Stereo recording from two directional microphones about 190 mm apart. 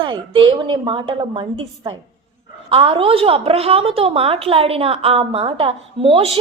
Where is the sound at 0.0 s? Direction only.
25° right (ahead or behind).